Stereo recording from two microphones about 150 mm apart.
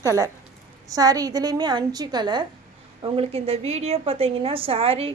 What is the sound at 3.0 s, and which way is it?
A woman's voice, 40° right (ahead or behind).